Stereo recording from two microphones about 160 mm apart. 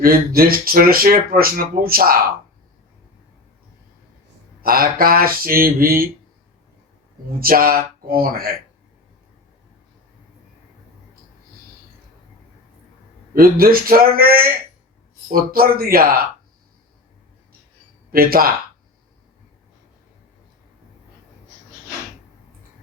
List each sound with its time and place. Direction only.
0.0 s speech: 65° right (ahead or behind)
4.6 s speech: 65° right (ahead or behind)
7.3 s speech: 65° right (ahead or behind)
13.3 s a man's voice: 65° right (ahead or behind)
18.1 s speech: 65° right (ahead or behind)